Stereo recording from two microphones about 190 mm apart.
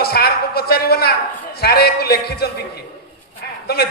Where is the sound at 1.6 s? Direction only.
55° left (ahead or behind).